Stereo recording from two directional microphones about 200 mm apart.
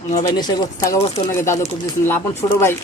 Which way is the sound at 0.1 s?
20° left (ahead or behind).